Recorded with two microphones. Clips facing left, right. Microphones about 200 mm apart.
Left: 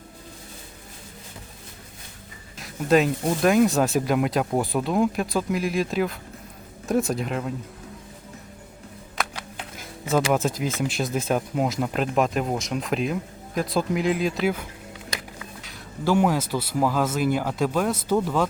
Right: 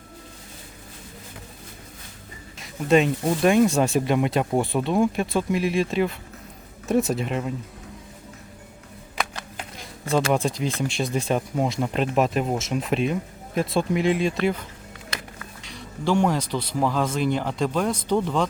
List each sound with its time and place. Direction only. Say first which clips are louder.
2.6 s speech: right 1 dB; centre (ahead or behind)
9.1 s a sound: right 1 dB; 5° left (ahead or behind)
10.3 s speech: even; 5° left (ahead or behind)